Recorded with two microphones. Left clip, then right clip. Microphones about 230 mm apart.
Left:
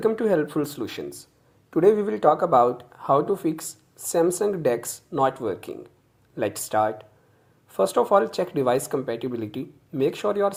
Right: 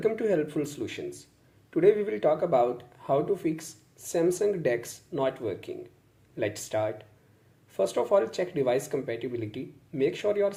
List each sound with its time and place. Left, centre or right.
0.0 s speech: centre
3.6 s speech: centre
4.2 s speech: left